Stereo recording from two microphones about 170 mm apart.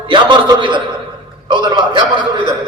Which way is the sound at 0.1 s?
30° right (ahead or behind).